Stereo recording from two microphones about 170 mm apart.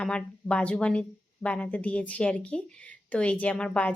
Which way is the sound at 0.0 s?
5° left (ahead or behind).